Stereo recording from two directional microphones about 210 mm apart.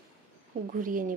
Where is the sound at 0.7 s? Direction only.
40° right (ahead or behind).